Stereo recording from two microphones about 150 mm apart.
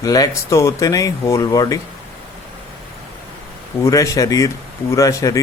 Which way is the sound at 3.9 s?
20° left (ahead or behind).